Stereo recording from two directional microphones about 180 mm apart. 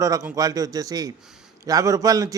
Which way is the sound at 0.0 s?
15° right (ahead or behind).